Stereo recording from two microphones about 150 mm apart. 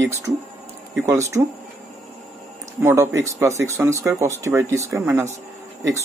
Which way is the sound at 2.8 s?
20° right (ahead or behind).